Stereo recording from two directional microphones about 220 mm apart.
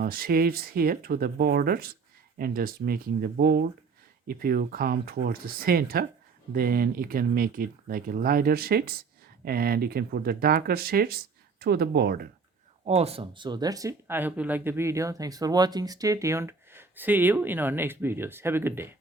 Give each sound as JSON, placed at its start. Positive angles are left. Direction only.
{"t": 0.0, "sound": "speech", "side_deg": -40}
{"t": 12.8, "sound": "speech", "side_deg": -30}